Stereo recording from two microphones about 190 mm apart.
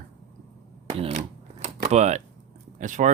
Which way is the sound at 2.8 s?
40° right (ahead or behind).